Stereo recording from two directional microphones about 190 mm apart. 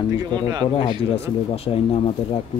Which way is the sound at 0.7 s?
30° left (ahead or behind).